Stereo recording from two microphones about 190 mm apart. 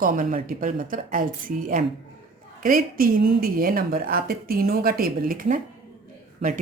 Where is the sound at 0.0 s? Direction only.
45° right (ahead or behind).